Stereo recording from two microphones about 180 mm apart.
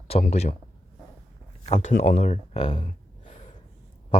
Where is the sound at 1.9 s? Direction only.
50° left (ahead or behind).